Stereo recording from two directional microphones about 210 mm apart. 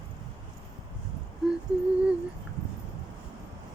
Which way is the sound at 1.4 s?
Centre (ahead or behind).